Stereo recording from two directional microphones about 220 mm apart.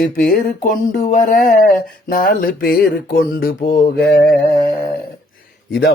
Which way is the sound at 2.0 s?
40° left (ahead or behind).